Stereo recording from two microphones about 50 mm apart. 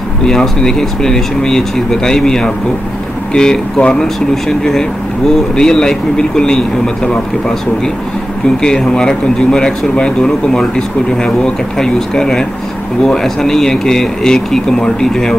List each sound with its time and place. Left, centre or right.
0.2 s speech: centre
8.6 s speech: centre